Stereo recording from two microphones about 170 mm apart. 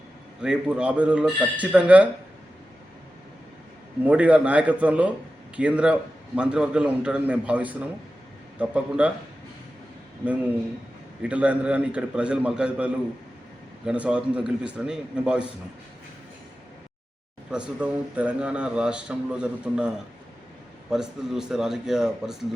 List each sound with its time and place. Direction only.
0.4 s a man's voice: 5° right (ahead or behind)
4.0 s a man's voice: 10° right (ahead or behind)
11.2 s a man's voice: 10° right (ahead or behind)
17.5 s a man's voice: 5° right (ahead or behind)
20.9 s a man's voice: 5° right (ahead or behind)